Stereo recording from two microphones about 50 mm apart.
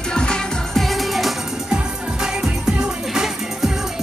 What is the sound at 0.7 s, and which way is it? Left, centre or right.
Music, centre.